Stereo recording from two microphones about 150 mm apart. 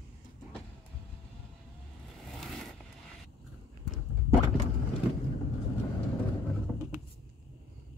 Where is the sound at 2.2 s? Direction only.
Centre (ahead or behind).